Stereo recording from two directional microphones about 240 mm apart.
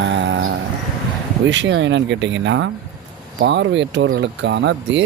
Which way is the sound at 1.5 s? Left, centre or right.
Right.